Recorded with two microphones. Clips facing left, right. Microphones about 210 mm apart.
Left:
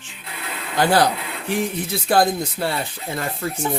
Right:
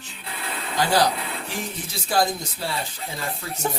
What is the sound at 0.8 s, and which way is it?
Speech, 55° left (ahead or behind).